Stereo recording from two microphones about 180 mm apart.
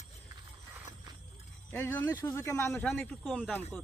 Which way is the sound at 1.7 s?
10° left (ahead or behind).